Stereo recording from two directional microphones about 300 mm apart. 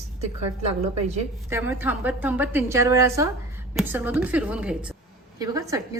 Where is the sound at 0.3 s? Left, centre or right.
Right.